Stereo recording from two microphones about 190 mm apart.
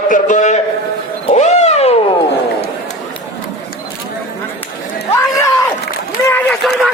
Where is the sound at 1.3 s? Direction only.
35° left (ahead or behind).